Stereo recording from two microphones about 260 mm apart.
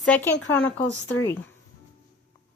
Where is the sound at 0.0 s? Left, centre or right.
Centre.